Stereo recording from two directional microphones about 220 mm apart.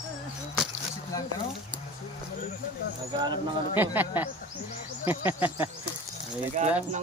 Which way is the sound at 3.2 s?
20° right (ahead or behind).